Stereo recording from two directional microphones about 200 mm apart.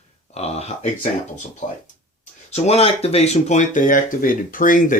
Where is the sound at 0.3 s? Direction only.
30° left (ahead or behind).